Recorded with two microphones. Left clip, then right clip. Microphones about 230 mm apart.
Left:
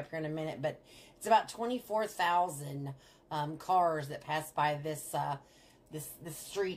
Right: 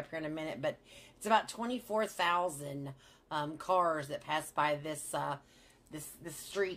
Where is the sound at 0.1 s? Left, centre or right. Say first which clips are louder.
Left 2 dB; right.